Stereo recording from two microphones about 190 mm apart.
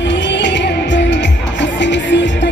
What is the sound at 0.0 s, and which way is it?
Music, 70° left (ahead or behind).